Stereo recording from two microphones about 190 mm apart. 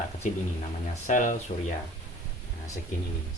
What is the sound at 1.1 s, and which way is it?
Speech, 40° left (ahead or behind).